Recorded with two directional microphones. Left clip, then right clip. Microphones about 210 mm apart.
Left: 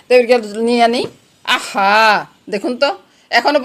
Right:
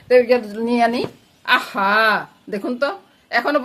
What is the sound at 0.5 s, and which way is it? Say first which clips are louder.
Speech: left 5 dB; 10° left (ahead or behind).